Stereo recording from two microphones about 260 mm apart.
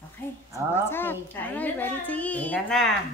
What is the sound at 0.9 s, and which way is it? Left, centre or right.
A woman's voice, centre.